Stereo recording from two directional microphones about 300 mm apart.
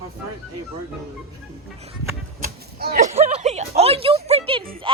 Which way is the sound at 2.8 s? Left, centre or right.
Right.